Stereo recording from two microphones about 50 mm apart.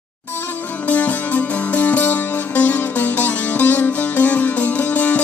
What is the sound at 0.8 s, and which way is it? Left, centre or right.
Music, left.